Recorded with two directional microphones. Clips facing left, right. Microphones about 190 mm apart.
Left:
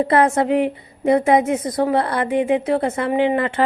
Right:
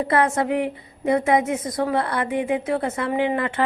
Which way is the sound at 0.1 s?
30° left (ahead or behind).